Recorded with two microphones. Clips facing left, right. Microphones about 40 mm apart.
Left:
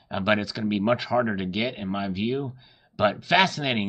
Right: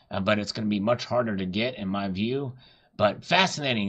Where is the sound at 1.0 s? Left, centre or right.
Left.